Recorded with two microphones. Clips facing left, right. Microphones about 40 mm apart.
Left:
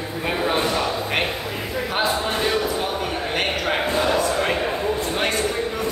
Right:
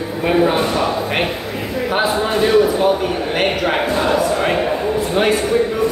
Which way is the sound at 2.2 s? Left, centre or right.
Centre.